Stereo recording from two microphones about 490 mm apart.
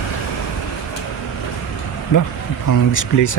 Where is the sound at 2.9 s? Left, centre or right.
Left.